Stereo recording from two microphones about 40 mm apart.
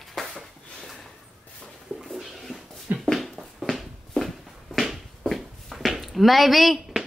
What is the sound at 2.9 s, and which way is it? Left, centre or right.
Dog, right.